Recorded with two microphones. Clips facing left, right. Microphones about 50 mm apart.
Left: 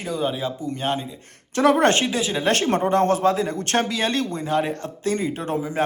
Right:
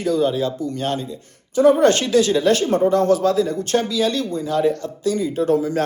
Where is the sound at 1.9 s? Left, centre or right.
Left.